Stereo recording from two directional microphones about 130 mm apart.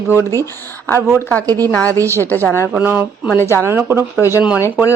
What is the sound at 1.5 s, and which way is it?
Speech, 30° right (ahead or behind).